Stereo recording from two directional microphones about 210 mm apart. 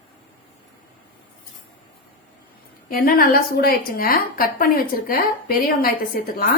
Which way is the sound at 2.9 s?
45° left (ahead or behind).